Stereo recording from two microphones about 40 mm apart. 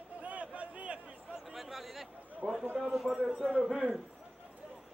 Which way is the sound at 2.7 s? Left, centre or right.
Right.